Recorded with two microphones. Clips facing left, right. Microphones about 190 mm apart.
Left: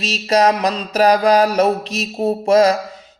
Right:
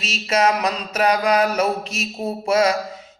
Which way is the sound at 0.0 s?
35° left (ahead or behind).